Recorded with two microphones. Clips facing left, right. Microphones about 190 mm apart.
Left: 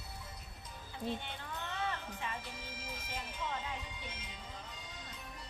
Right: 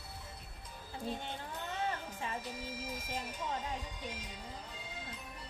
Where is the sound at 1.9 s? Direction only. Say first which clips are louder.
Right 2 dB; 40° right (ahead or behind).